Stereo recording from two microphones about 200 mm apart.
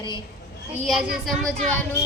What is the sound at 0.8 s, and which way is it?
Speech, centre (ahead or behind).